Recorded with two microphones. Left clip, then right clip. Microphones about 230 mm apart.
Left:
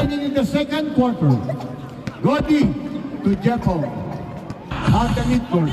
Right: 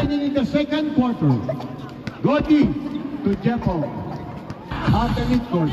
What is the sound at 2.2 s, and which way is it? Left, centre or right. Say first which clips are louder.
Speech: even; left.